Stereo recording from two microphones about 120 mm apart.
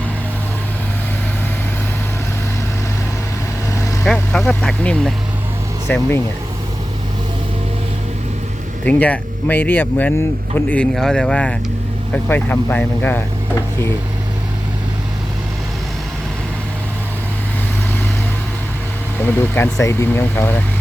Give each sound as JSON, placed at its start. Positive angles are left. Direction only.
{"t": 4.0, "sound": "speech", "side_deg": 5}
{"t": 5.9, "sound": "speech", "side_deg": 20}
{"t": 8.8, "sound": "speech", "side_deg": 10}
{"t": 19.2, "sound": "speech", "side_deg": 20}